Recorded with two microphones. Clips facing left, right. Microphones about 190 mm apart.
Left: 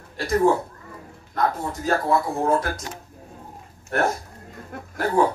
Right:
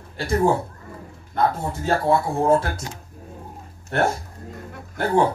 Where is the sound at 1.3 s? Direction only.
30° right (ahead or behind).